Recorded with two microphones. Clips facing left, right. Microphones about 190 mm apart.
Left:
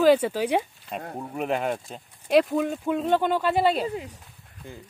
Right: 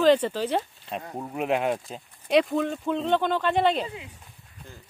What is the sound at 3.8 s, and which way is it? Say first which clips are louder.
Speech: left 8 dB; 40° left (ahead or behind).